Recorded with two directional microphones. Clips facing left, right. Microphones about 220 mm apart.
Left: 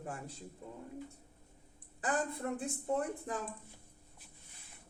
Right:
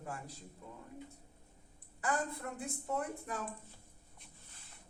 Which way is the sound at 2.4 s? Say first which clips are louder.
Left 7 dB; 30° left (ahead or behind).